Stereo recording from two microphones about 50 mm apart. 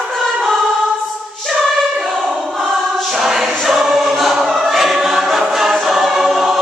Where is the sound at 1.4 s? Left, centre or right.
Centre.